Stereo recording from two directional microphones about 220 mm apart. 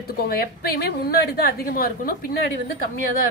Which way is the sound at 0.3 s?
45° left (ahead or behind).